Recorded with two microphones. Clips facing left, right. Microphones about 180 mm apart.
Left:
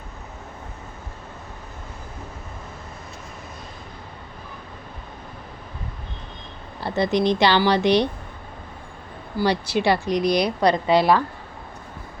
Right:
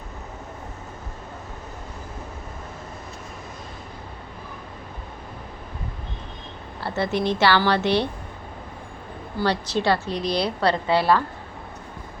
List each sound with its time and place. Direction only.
6.8 s a woman's voice: 15° left (ahead or behind)
9.4 s a woman's voice: 10° left (ahead or behind)